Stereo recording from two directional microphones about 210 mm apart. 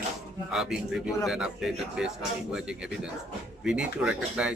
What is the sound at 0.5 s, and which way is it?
Speech, centre (ahead or behind).